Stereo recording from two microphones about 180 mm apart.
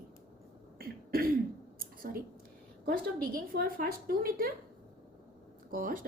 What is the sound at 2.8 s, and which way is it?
A woman's voice, 55° right (ahead or behind).